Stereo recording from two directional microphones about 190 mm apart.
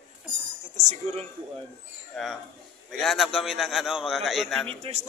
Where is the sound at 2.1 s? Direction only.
Centre (ahead or behind).